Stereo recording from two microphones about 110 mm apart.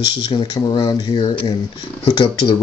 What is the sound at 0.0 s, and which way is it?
Speech, 40° left (ahead or behind).